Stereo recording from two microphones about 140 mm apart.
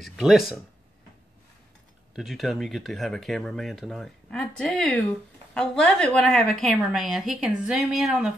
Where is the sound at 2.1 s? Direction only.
Centre (ahead or behind).